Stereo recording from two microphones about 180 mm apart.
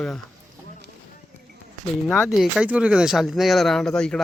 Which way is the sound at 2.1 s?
Centre (ahead or behind).